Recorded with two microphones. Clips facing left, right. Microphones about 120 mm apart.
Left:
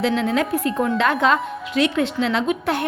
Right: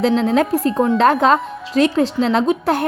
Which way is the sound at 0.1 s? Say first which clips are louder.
Right 5 dB; 35° right (ahead or behind).